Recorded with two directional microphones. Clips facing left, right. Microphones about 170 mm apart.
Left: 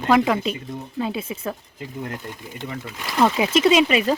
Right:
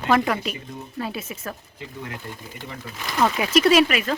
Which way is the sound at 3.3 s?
20° left (ahead or behind).